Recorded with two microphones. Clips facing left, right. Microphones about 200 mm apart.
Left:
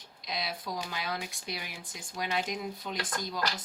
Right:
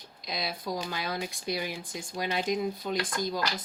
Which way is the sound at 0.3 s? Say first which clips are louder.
Right 3 dB; 40° right (ahead or behind).